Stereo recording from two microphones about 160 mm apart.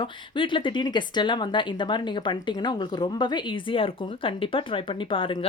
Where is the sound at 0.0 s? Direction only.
30° left (ahead or behind).